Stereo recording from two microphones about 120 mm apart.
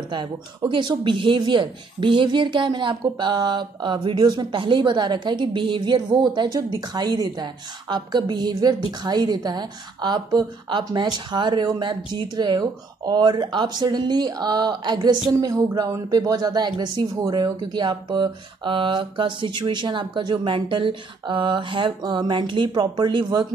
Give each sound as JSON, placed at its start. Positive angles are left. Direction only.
{"t": 0.1, "sound": "speech", "side_deg": -40}